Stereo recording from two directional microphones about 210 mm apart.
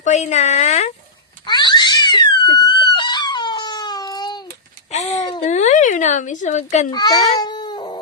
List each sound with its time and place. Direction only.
0.0 s speech: 35° left (ahead or behind)
1.5 s cat: 20° left (ahead or behind)
4.9 s a sound: 35° left (ahead or behind)
5.5 s speech: 35° left (ahead or behind)
6.9 s a child's voice: 20° left (ahead or behind)
7.3 s cat: 20° left (ahead or behind)